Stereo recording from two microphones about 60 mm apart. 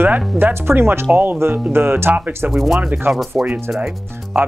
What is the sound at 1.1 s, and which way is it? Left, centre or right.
Speech, centre.